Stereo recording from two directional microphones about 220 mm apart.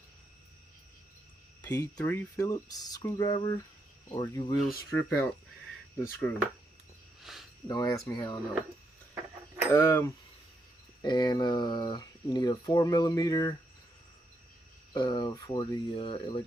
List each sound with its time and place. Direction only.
1.6 s speech: 15° left (ahead or behind)
4.9 s speech: 10° left (ahead or behind)
7.2 s speech: centre (ahead or behind)
7.7 s speech: 15° left (ahead or behind)
9.7 s speech: 10° left (ahead or behind)
14.9 s speech: 20° left (ahead or behind)